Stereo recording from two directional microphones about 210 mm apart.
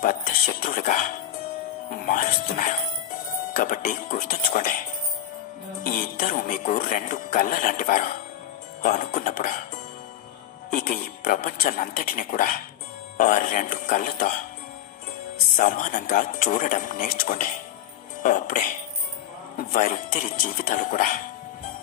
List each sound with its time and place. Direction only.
0.0 s music: 40° left (ahead or behind)
1.9 s speech: 40° left (ahead or behind)
5.9 s speech: 40° left (ahead or behind)
10.7 s speech: 40° left (ahead or behind)
15.5 s speech: 35° left (ahead or behind)